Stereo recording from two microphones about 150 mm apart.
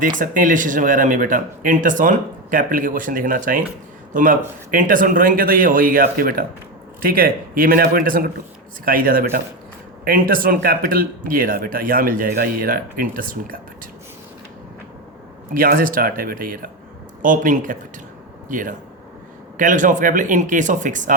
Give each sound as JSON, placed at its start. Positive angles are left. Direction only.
{"t": 0.2, "sound": "speech", "side_deg": -60}
{"t": 15.5, "sound": "speech", "side_deg": -70}
{"t": 17.2, "sound": "speech", "side_deg": -60}